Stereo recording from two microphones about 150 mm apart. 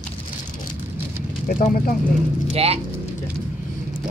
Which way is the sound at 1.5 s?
65° left (ahead or behind).